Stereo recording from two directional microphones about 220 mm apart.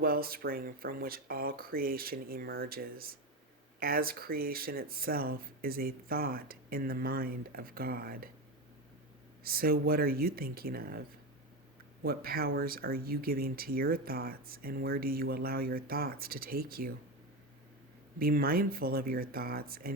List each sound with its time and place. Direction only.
0.0 s speech: 40° right (ahead or behind)
9.4 s speech: 40° right (ahead or behind)
12.0 s speech: 45° right (ahead or behind)
18.2 s speech: 40° right (ahead or behind)